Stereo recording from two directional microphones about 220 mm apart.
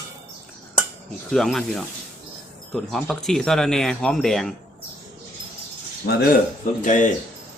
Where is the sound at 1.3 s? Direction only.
Centre (ahead or behind).